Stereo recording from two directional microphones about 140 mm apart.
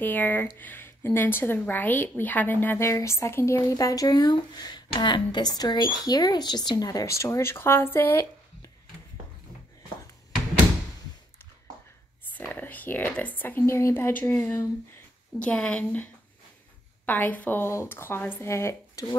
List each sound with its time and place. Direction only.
0.0 s a woman's voice: 15° left (ahead or behind)
12.3 s speech: 10° left (ahead or behind)